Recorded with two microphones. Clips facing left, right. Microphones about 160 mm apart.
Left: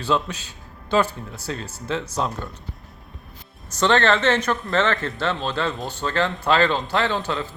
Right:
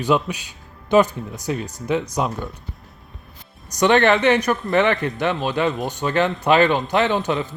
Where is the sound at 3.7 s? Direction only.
15° right (ahead or behind).